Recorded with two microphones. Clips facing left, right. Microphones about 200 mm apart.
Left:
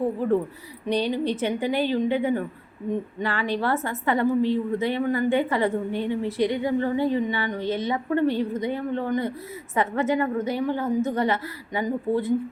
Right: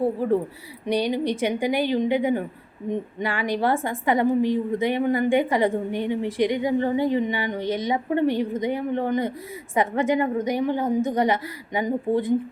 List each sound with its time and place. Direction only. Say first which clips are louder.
0.0 s a woman's voice: right 1 dB; 10° right (ahead or behind)